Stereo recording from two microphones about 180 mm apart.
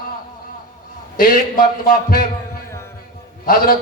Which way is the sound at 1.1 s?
55° left (ahead or behind).